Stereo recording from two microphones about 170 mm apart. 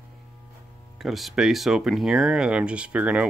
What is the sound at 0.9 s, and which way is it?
Speech, centre (ahead or behind).